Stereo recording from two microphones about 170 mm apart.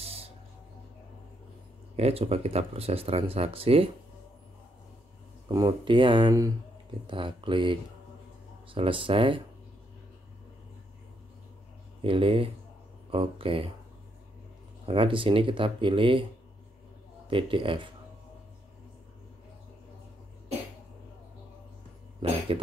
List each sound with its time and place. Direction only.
0.0 s a sound: 35° right (ahead or behind)
2.0 s speech: 35° right (ahead or behind)
5.5 s speech: 25° right (ahead or behind)
12.0 s speech: 30° right (ahead or behind)
14.9 s speech: 30° right (ahead or behind)
17.3 s speech: 30° right (ahead or behind)
22.2 s speech: 30° right (ahead or behind)